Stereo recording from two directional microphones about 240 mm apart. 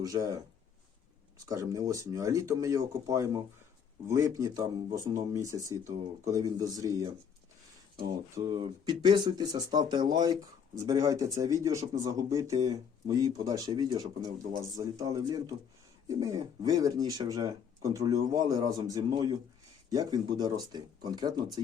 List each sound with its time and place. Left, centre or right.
0.0 s speech: centre
1.5 s speech: centre